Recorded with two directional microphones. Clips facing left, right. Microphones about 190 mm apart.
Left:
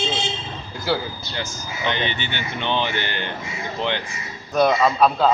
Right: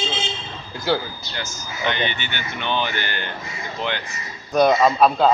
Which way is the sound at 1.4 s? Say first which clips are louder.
Even; 35° left (ahead or behind).